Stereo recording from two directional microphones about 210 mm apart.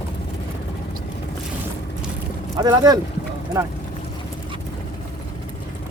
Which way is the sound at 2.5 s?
20° right (ahead or behind).